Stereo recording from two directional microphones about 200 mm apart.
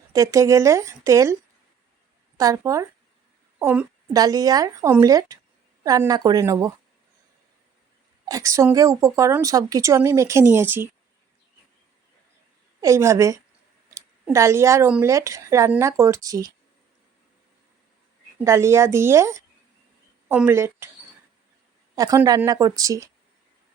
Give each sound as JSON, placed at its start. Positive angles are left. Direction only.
{"t": 0.1, "sound": "a woman's voice", "side_deg": -15}
{"t": 2.4, "sound": "a woman's voice", "side_deg": -15}
{"t": 8.3, "sound": "a woman's voice", "side_deg": -15}
{"t": 12.8, "sound": "a woman's voice", "side_deg": -15}
{"t": 18.4, "sound": "a woman's voice", "side_deg": -15}
{"t": 21.9, "sound": "a woman's voice", "side_deg": -15}